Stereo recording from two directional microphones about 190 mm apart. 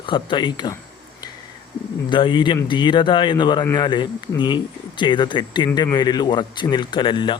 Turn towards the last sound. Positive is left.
turn(degrees=25)  # may be behind; listen again after turning